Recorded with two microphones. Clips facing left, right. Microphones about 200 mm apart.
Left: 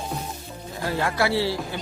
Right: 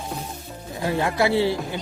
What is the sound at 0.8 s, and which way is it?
Speech, 20° right (ahead or behind).